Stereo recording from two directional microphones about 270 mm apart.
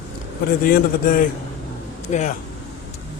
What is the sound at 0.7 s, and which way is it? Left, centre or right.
Speech, left.